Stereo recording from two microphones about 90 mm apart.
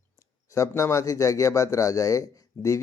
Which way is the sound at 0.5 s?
35° left (ahead or behind).